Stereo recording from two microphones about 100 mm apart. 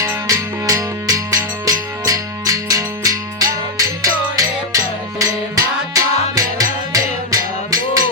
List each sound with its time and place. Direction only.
0.0 s music: 35° right (ahead or behind)